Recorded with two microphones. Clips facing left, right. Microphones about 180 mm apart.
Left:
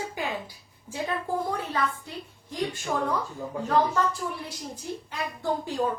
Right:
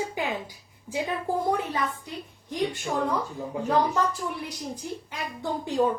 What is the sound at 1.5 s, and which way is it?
A woman's voice, 15° right (ahead or behind).